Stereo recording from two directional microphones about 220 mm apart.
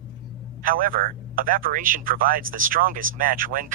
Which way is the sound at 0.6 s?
40° right (ahead or behind).